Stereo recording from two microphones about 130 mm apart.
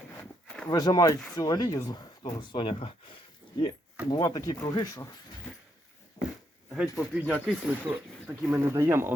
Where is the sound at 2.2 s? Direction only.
40° left (ahead or behind).